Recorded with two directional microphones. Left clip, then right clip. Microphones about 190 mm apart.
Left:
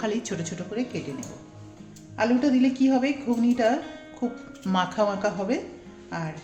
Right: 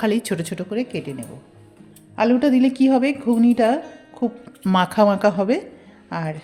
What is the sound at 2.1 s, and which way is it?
A woman's voice, 60° right (ahead or behind).